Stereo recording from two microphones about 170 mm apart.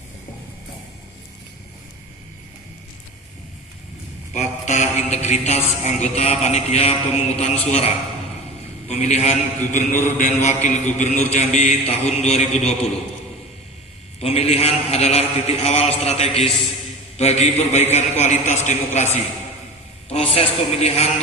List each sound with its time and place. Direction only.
4.4 s a man's voice: 45° left (ahead or behind)
14.2 s a man's voice: 35° left (ahead or behind)